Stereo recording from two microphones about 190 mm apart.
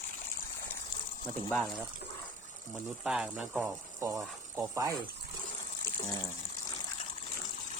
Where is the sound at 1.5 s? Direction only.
Centre (ahead or behind); by 4.9 s 15° right (ahead or behind).